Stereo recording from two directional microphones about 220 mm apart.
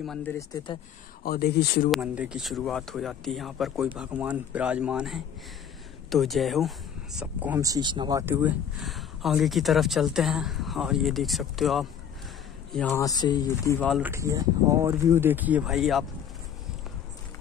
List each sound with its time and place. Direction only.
0.0 s speech: 5° left (ahead or behind)
1.2 s speech: 45° left (ahead or behind)
1.9 s speech: 5° right (ahead or behind)
13.0 s speech: 15° left (ahead or behind)
13.7 s speech: centre (ahead or behind)
14.0 s speech: 15° right (ahead or behind)